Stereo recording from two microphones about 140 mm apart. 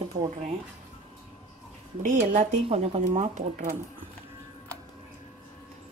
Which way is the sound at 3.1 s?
60° right (ahead or behind).